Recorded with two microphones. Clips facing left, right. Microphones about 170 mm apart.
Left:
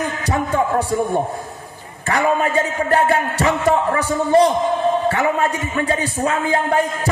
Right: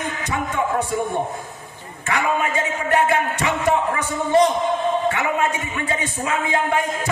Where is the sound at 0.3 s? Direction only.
35° left (ahead or behind).